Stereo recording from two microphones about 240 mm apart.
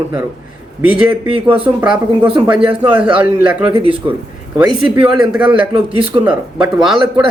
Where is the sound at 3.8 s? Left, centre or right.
Right.